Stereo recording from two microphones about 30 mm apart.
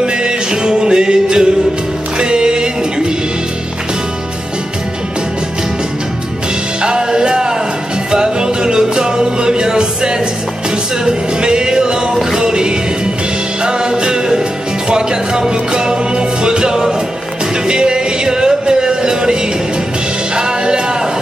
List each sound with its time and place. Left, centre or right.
0.0 s music: right
6.8 s music: right
20.3 s music: right